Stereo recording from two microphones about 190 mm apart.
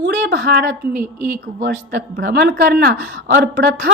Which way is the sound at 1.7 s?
55° right (ahead or behind).